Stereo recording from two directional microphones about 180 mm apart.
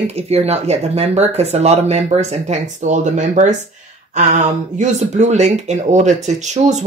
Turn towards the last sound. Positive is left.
turn(degrees=-40)  # may be behind; listen again after turning